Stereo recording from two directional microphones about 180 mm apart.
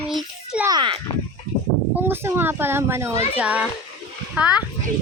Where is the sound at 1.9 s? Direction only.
10° right (ahead or behind).